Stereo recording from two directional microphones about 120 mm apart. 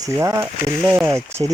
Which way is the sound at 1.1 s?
25° right (ahead or behind).